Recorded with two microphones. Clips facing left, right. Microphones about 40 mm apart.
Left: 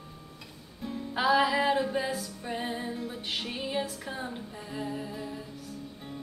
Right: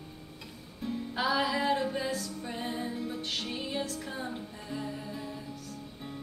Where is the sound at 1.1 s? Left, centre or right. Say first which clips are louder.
Left 5 dB; centre.